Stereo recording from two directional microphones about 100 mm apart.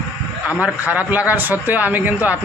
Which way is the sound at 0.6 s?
15° right (ahead or behind).